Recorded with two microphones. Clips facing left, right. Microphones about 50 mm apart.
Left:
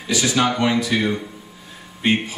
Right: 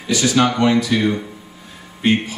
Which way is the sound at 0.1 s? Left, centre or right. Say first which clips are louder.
Right 3 dB; centre.